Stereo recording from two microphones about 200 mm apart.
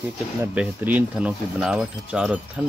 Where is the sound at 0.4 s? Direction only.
10° right (ahead or behind).